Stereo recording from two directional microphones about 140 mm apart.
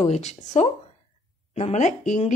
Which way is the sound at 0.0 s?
50° left (ahead or behind).